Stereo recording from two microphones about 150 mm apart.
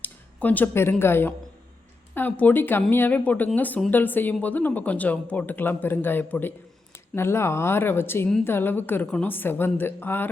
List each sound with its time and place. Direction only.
0.0 s speech: 10° left (ahead or behind)